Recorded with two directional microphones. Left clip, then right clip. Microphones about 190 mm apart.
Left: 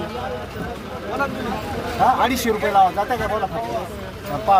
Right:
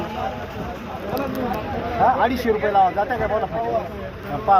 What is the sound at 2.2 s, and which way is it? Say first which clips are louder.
Speech: even; 35° left (ahead or behind).